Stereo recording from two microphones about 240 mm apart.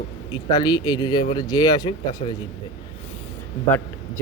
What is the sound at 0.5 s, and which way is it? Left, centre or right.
Speech, centre.